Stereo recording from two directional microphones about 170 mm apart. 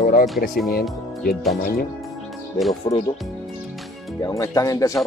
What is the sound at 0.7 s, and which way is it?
Speech, 65° left (ahead or behind).